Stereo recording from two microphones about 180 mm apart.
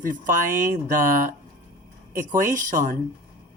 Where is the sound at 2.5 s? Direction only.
45° right (ahead or behind).